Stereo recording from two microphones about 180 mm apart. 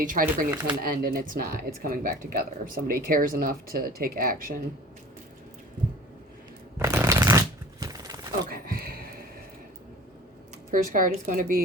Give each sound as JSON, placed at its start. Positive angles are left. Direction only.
{"t": 0.0, "sound": "speech", "side_deg": -45}
{"t": 0.5, "sound": "speech", "side_deg": -10}
{"t": 0.8, "sound": "speech", "side_deg": -55}
{"t": 6.7, "sound": "shuffling cards", "side_deg": -15}
{"t": 8.4, "sound": "a sound", "side_deg": -55}
{"t": 10.9, "sound": "speech", "side_deg": -50}